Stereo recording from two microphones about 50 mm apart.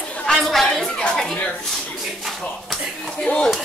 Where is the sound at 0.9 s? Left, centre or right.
Left.